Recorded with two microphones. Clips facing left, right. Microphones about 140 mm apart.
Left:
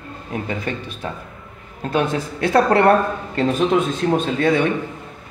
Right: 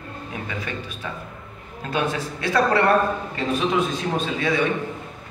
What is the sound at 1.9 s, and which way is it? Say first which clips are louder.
Speech: left 4 dB; 55° left (ahead or behind).